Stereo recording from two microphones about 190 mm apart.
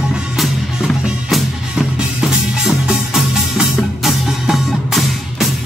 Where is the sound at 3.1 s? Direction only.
Centre (ahead or behind).